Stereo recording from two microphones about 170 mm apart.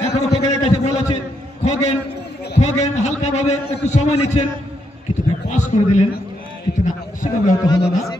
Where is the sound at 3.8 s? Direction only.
40° left (ahead or behind).